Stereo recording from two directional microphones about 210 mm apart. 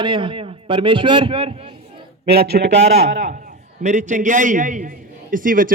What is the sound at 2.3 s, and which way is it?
Speech, 50° right (ahead or behind).